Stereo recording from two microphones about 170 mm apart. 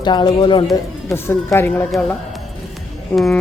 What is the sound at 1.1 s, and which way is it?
Speech, 15° left (ahead or behind).